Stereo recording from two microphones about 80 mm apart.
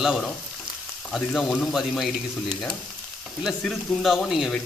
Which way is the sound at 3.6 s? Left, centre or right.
Centre.